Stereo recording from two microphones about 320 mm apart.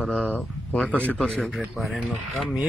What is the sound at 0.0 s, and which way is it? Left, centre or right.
Speech, centre.